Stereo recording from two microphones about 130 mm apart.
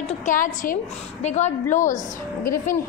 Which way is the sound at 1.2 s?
65° left (ahead or behind).